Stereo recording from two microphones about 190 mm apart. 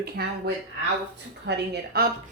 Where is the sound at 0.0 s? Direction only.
55° right (ahead or behind).